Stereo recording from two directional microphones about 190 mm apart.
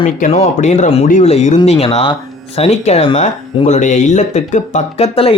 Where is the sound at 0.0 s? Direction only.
35° left (ahead or behind).